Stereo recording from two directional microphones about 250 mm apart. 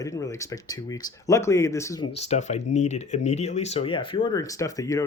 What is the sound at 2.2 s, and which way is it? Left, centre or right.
Speech, left.